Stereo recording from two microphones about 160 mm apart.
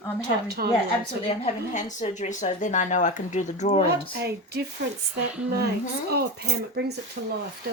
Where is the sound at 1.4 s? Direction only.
50° left (ahead or behind).